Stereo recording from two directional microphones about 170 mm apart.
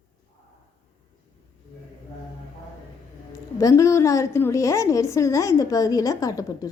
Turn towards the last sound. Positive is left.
turn(degrees=20)  # may be behind; listen again after turning